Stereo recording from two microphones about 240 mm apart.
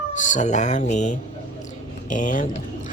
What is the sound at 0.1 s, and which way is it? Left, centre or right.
Speech, left.